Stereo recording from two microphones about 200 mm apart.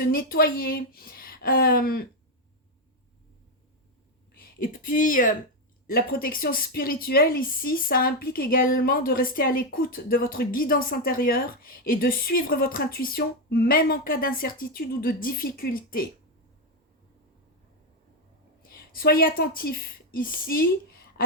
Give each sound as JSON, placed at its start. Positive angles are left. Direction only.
{"t": 0.1, "sound": "a woman's voice", "side_deg": 45}
{"t": 4.4, "sound": "a woman's voice", "side_deg": 45}
{"t": 18.9, "sound": "a woman's voice", "side_deg": 45}